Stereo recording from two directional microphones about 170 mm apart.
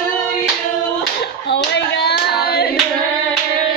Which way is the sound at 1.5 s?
80° left.